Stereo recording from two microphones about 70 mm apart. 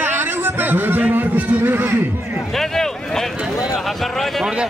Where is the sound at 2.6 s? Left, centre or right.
Centre.